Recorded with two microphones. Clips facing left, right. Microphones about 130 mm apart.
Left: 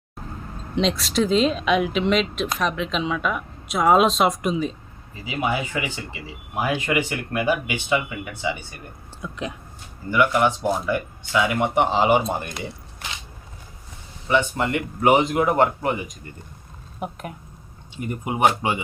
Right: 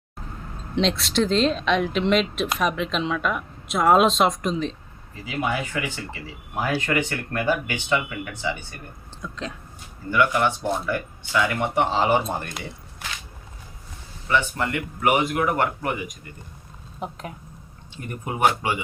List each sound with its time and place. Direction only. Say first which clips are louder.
0.8 s speech: left 1 dB; centre (ahead or behind); by 12.5 s 15° left (ahead or behind)
14.3 s speech: left 3 dB; 20° left (ahead or behind)
17.0 s speech: left 2 dB; 5° left (ahead or behind)
17.9 s speech: left 4 dB; 20° left (ahead or behind)